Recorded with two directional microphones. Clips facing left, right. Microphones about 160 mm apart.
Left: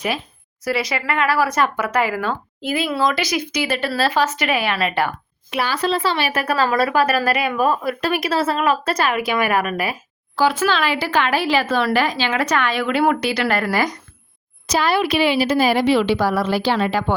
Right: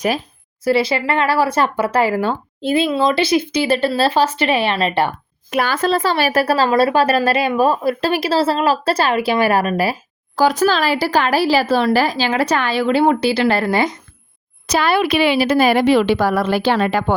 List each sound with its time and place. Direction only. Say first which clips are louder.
0.6 s speech: right 6 dB; 30° right (ahead or behind)
5.5 s speech: right 3 dB; 50° right (ahead or behind); by 14.0 s 25° right (ahead or behind)
14.7 s a woman's voice: right 2 dB; 60° right (ahead or behind)